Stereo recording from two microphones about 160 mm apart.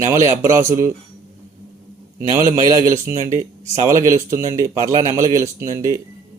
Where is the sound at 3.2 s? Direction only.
55° right (ahead or behind).